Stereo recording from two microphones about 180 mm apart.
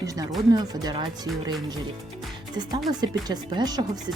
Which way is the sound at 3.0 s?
25° right (ahead or behind).